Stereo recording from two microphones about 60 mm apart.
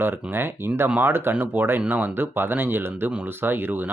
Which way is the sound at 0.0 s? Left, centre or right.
Right.